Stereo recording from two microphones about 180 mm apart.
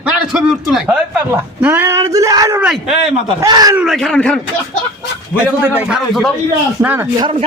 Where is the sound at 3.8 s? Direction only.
Centre (ahead or behind).